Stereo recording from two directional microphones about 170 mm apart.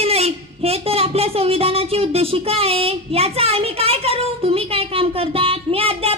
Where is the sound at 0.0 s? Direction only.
35° right (ahead or behind).